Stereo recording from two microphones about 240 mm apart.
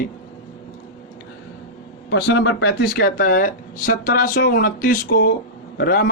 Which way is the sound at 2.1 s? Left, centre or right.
Left.